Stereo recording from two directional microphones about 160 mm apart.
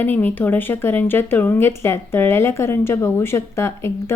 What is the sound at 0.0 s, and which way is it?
A woman's voice, 10° left (ahead or behind).